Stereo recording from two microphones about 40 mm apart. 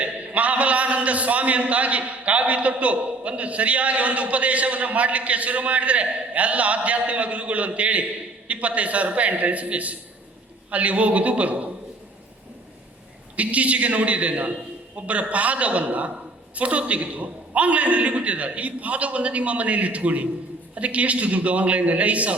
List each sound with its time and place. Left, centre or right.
0.0 s a man's voice: right
13.3 s a man's voice: right